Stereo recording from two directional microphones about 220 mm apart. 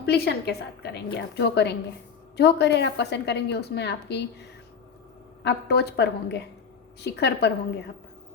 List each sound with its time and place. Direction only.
0.0 s a woman's voice: 50° left (ahead or behind)
5.4 s a woman's voice: 50° left (ahead or behind)